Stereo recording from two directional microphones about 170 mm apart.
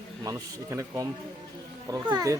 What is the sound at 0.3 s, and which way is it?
Speech, 20° right (ahead or behind).